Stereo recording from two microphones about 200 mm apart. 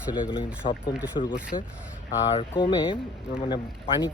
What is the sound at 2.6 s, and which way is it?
Speech, 20° left (ahead or behind).